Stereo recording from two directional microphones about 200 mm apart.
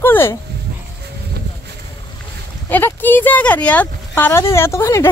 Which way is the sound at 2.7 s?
10° left (ahead or behind).